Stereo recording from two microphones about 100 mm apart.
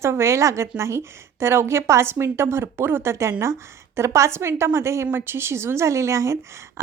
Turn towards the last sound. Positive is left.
turn(degrees=-30)  # may be behind; listen again after turning